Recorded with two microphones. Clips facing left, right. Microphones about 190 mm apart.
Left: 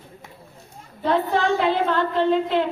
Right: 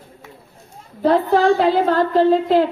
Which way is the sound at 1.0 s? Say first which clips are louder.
Right 6 dB; 35° right (ahead or behind).